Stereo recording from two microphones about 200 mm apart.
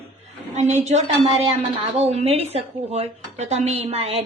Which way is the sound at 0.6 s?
35° right (ahead or behind).